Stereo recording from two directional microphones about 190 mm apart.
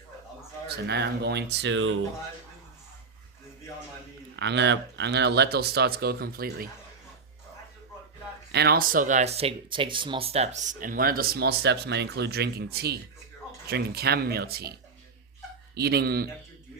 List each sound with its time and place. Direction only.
0.9 s speech: 65° right (ahead or behind); by 2.0 s 85° right
4.4 s speech: 65° right (ahead or behind)
8.5 s speech: 55° right (ahead or behind)
15.7 s speech: 55° right (ahead or behind)